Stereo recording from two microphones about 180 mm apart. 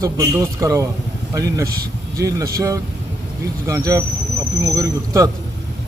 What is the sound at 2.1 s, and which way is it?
A man's voice, 20° right (ahead or behind).